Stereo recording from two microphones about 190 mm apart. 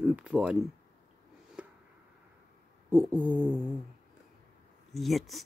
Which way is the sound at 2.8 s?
10° right (ahead or behind).